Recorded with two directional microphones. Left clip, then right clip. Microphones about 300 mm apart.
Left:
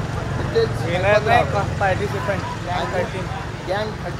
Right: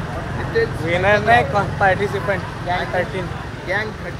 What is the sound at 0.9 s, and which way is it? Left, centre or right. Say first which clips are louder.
Speech: right 3 dB; right.